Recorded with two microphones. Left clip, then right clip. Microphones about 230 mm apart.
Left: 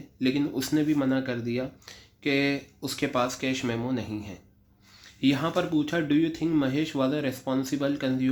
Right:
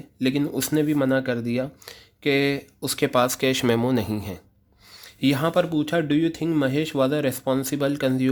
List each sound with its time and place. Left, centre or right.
0.2 s speech: right